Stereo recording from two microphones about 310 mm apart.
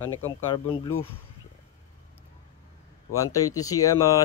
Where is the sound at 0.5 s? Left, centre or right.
Centre.